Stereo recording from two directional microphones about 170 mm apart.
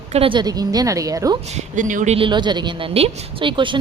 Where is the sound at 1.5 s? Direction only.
50° right (ahead or behind).